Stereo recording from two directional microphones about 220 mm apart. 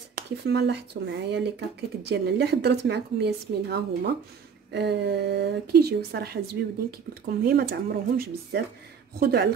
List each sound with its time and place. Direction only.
0.1 s a woman's voice: 50° right (ahead or behind)